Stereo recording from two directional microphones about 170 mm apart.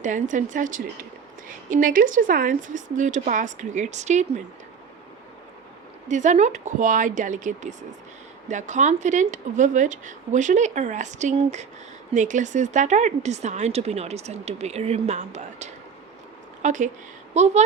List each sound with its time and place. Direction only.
0.0 s speech: 50° right (ahead or behind)
6.1 s speech: 45° right (ahead or behind)